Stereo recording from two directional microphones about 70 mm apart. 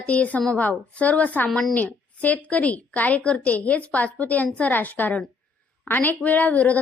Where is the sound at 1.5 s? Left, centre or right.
Centre.